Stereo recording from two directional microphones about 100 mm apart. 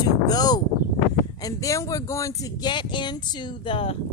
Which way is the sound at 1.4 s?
35° left (ahead or behind).